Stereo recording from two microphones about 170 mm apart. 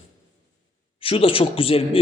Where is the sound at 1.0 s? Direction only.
30° left (ahead or behind).